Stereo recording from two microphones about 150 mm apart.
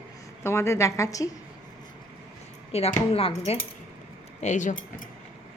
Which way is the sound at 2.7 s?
45° left (ahead or behind).